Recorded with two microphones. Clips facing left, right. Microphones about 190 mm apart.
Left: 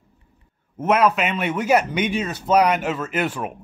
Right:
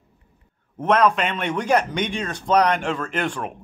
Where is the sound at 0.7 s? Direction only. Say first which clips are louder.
Even; 5° left (ahead or behind).